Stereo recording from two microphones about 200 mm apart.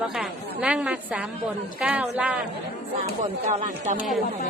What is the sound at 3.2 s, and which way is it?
Speech, 40° right (ahead or behind).